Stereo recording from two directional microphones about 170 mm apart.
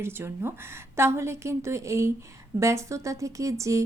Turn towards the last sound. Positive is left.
turn(degrees=-20)  # may be behind; listen again after turning